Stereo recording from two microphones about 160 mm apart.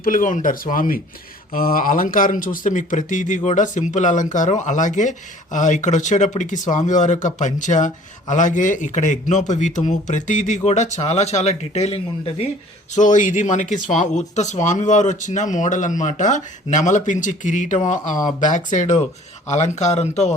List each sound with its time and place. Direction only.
0.0 s speech: 60° left (ahead or behind); by 12.5 s 40° left (ahead or behind)
12.9 s speech: 50° left (ahead or behind)